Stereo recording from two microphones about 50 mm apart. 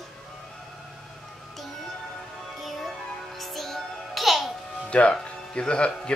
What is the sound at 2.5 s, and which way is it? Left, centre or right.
Music, centre.